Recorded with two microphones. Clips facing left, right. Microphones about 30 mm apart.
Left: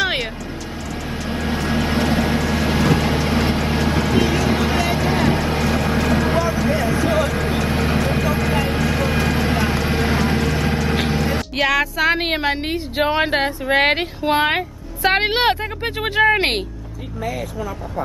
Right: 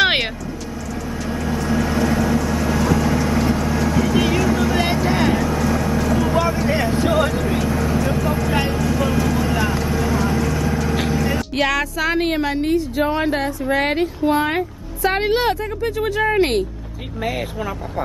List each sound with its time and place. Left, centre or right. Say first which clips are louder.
1.3 s vehicle: even; left
4.7 s vehicle: right 1 dB; left
11.5 s music: left 2 dB; centre
11.8 s speech: left 3 dB; centre
12.2 s a woman's voice: right 1 dB; left